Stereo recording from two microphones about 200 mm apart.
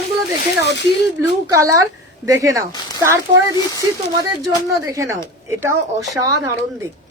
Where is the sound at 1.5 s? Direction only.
15° right (ahead or behind).